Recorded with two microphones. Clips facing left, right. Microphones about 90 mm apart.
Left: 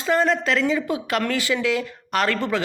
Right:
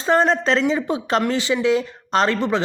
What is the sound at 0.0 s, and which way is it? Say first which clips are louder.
Speech: right 3 dB; 30° right (ahead or behind).